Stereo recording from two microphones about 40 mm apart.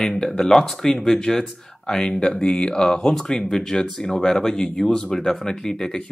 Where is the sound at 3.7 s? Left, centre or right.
Left.